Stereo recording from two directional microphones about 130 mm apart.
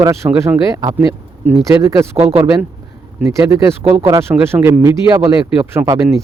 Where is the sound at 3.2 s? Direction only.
25° right (ahead or behind).